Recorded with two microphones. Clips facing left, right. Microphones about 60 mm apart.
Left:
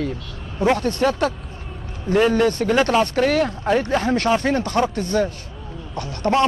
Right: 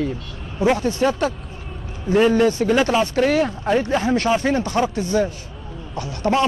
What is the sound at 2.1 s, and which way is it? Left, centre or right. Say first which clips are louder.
Speech: right 1 dB; left.